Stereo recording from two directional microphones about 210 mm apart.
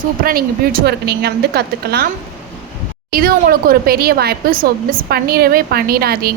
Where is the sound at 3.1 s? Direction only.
45° right (ahead or behind).